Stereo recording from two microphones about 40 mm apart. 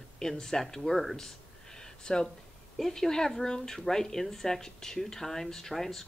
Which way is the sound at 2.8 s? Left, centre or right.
Centre.